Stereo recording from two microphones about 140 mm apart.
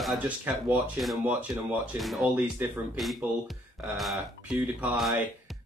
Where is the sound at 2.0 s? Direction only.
Centre (ahead or behind).